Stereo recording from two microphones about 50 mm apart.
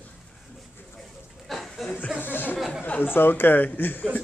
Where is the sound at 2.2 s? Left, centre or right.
Left.